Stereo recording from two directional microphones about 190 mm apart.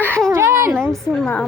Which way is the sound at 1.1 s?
5° left (ahead or behind).